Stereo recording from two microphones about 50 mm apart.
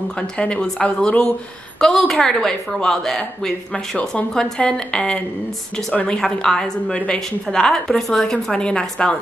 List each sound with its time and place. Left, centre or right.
0.4 s a woman's voice: left